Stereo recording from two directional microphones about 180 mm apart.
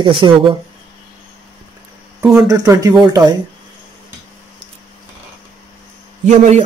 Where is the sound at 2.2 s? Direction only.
5° right (ahead or behind).